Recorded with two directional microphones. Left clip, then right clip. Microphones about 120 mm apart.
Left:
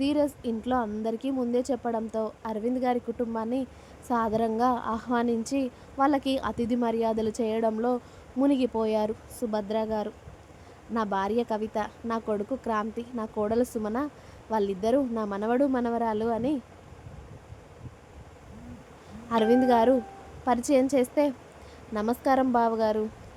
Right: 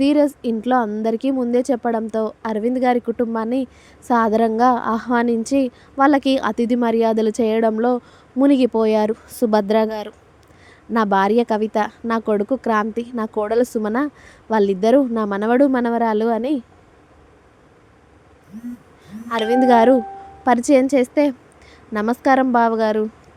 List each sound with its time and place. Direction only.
0.0 s a woman's voice: 40° right (ahead or behind); by 10.1 s 60° right (ahead or behind)
10.9 s speech: 50° right (ahead or behind)
19.3 s a woman's voice: 40° right (ahead or behind)